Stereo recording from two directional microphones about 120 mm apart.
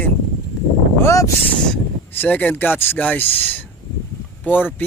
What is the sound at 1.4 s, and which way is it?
Speech, 15° left (ahead or behind).